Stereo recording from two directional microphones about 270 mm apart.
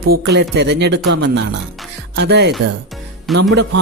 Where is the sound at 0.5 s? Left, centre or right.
Right.